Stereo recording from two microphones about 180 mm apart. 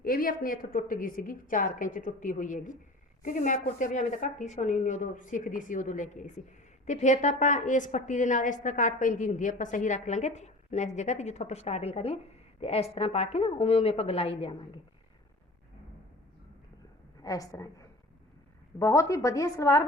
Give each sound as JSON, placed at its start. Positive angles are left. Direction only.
{"t": 0.0, "sound": "a woman's voice", "side_deg": 55}
{"t": 17.2, "sound": "a woman's voice", "side_deg": 20}